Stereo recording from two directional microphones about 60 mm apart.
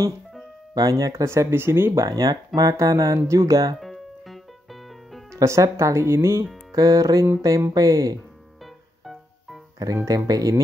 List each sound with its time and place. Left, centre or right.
0.7 s speech: right
1.1 s speech: right
2.0 s speech: right
3.2 s speech: right
3.8 s music: centre
5.3 s speech: right
6.7 s speech: right
9.0 s music: centre
10.0 s speech: right